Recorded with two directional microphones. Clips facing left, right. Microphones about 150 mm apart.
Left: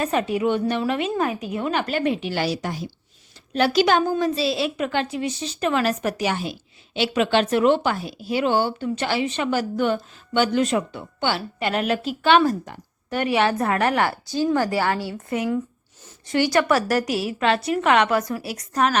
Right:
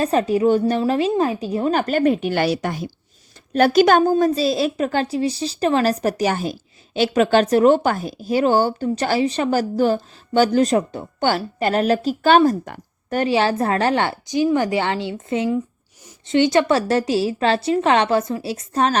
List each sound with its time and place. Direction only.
0.0 s a woman's voice: 35° right (ahead or behind); by 2.9 s 60° right (ahead or behind)
3.5 s a woman's voice: 45° right (ahead or behind)
12.6 s a sound: 60° right (ahead or behind)
13.1 s a woman's voice: 30° right (ahead or behind)